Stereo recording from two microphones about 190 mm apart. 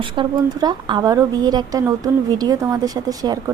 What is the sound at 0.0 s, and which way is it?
A woman's voice, 25° right (ahead or behind).